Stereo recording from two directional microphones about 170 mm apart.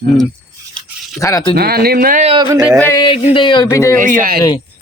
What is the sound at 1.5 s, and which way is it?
Speech, 65° right (ahead or behind).